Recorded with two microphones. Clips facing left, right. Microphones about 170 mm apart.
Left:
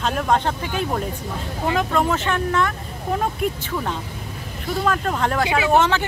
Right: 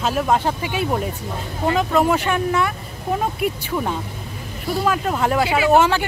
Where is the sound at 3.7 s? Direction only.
10° right (ahead or behind).